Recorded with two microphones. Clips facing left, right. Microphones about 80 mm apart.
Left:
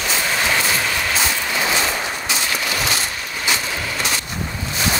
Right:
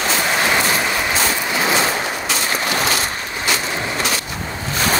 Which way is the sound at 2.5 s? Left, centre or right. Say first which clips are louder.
Right 5 dB; right.